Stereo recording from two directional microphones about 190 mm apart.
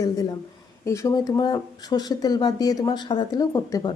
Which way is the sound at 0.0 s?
20° left (ahead or behind).